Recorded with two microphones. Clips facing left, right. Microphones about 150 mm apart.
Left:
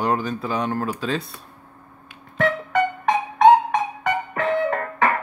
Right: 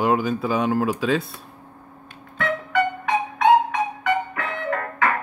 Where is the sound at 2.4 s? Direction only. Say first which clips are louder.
Left 2 dB; 40° left (ahead or behind).